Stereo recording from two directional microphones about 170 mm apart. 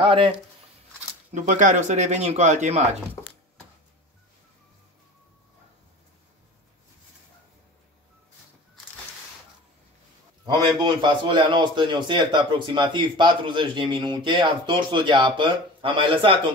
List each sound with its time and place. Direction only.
0.0 s speech: 30° right (ahead or behind)
1.3 s a man's voice: 45° right (ahead or behind)
10.4 s a man's voice: 25° right (ahead or behind)